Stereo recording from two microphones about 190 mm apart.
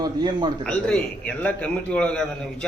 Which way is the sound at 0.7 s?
5° left (ahead or behind).